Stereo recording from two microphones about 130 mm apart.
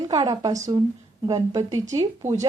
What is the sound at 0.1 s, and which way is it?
A woman's voice, 30° right (ahead or behind).